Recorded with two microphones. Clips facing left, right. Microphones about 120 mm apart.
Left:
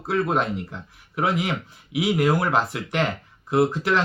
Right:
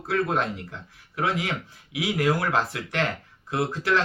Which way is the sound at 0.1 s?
20° left (ahead or behind).